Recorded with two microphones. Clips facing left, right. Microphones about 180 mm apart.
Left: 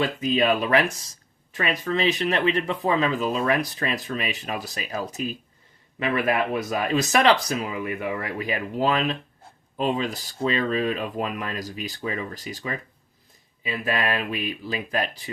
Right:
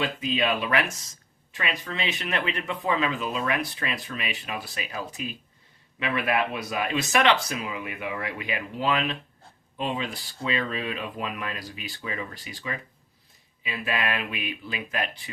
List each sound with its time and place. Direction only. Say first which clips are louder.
0.0 s speech: left 4 dB; 40° left (ahead or behind)